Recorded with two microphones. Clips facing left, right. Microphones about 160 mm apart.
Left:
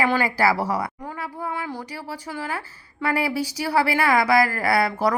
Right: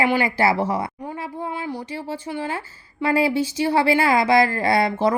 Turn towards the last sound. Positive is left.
turn(degrees=-25)  # may be behind; listen again after turning